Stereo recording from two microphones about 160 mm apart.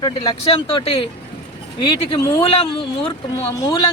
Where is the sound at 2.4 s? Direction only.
35° left (ahead or behind).